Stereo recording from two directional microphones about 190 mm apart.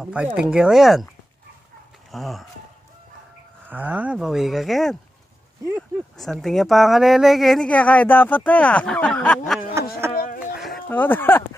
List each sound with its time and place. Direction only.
0.0 s speech: 5° right (ahead or behind)
2.0 s speech: centre (ahead or behind)
3.6 s speech: 10° right (ahead or behind)
10.1 s a sound: 45° left (ahead or behind)
10.6 s speech: 5° left (ahead or behind)